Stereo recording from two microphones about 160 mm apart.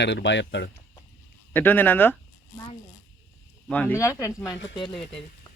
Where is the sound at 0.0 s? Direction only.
90° left.